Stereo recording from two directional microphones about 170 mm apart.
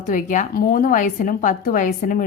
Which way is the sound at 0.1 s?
50° left (ahead or behind).